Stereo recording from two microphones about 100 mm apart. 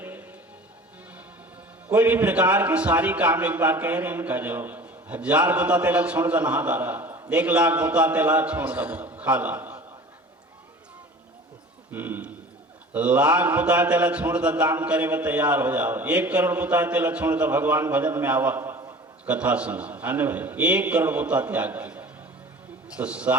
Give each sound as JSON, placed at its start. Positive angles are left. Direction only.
{"t": 0.0, "sound": "music", "side_deg": -20}
{"t": 1.9, "sound": "a man's voice", "side_deg": -15}
{"t": 11.9, "sound": "a sound", "side_deg": -20}
{"t": 12.9, "sound": "a man's voice", "side_deg": -15}